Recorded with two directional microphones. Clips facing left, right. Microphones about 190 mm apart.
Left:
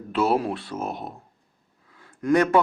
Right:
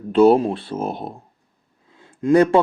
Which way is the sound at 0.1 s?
30° right (ahead or behind).